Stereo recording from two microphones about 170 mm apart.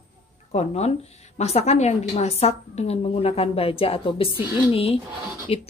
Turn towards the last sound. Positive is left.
turn(degrees=35)  # may be behind; listen again after turning